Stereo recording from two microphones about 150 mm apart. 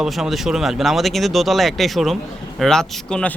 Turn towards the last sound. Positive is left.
turn(degrees=5)  # may be behind; listen again after turning